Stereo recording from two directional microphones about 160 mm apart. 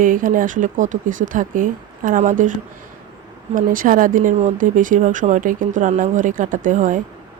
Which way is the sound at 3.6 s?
60° right (ahead or behind).